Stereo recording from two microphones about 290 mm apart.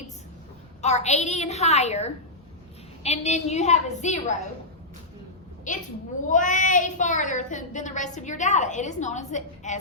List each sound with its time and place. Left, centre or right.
0.8 s a woman's voice: left
5.7 s a woman's voice: left